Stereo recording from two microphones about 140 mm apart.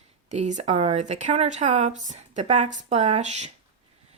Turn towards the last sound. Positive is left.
turn(degrees=-55)  # may be behind; listen again after turning